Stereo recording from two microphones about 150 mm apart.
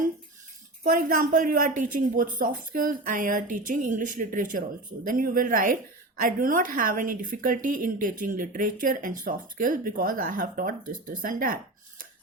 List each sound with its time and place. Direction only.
0.9 s a woman's voice: 65° right (ahead or behind)